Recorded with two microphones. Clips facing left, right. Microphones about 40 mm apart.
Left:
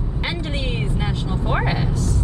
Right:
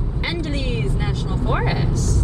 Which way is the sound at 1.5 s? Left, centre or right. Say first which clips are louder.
Even; centre.